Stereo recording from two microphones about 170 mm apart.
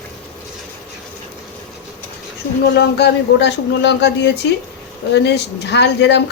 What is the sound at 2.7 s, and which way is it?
Speech, 80° left.